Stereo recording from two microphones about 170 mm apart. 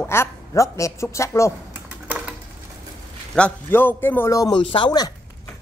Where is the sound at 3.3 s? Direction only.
10° left (ahead or behind); by 5.1 s 25° left (ahead or behind).